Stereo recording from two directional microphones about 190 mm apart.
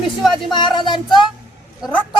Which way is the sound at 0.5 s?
25° left (ahead or behind).